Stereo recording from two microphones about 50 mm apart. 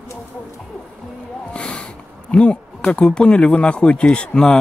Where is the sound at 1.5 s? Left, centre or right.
Centre.